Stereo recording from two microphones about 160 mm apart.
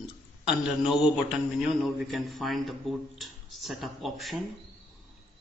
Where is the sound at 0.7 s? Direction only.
5° right (ahead or behind).